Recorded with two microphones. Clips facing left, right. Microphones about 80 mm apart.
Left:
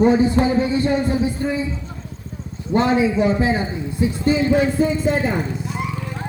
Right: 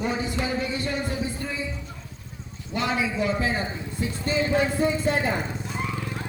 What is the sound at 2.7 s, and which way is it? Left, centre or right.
Speech, left.